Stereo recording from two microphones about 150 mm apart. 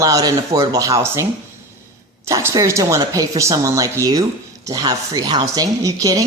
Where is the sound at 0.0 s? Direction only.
25° right (ahead or behind).